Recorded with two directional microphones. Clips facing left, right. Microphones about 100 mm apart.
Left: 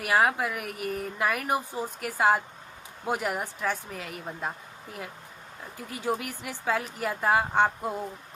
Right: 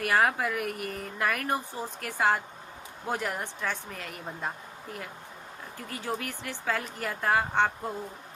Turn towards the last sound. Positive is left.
turn(degrees=10)  # may be behind; listen again after turning